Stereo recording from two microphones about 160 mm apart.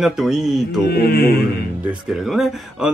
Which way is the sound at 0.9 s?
85° left.